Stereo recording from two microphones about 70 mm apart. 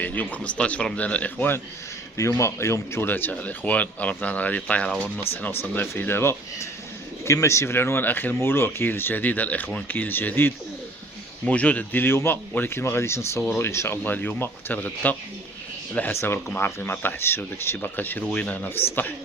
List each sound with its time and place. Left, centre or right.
0.0 s speech: left
2.4 s speech: left; by 4.9 s centre
5.3 s speech: left
11.4 s speech: centre